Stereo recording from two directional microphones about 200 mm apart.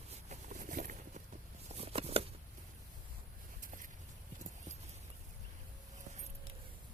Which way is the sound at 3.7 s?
40° right (ahead or behind).